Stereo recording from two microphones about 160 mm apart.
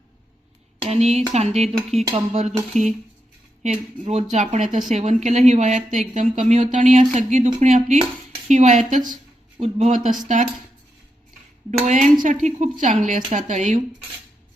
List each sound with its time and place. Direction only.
0.8 s speech: 40° right (ahead or behind)
3.6 s speech: 45° right (ahead or behind)
11.8 s speech: 50° right (ahead or behind)